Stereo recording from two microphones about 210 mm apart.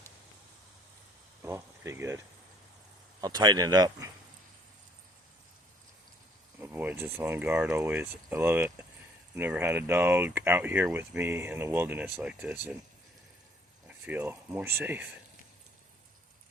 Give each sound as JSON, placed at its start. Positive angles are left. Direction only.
{"t": 1.5, "sound": "speech", "side_deg": -10}
{"t": 6.6, "sound": "speech", "side_deg": -10}
{"t": 13.8, "sound": "speech", "side_deg": -10}